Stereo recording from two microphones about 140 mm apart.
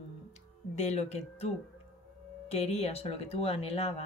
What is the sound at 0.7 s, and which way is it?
Speech, 50° left (ahead or behind).